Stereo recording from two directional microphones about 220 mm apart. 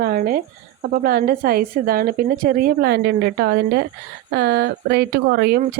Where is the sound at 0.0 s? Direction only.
40° right (ahead or behind).